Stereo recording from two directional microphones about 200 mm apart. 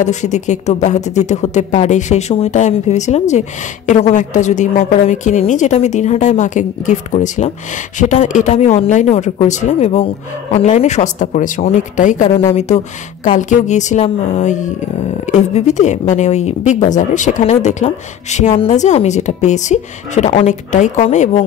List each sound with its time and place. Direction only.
0.0 s speech: 35° left (ahead or behind)